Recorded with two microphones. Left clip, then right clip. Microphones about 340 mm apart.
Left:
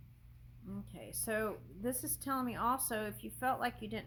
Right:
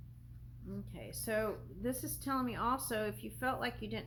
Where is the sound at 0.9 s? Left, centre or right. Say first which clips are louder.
Even; left.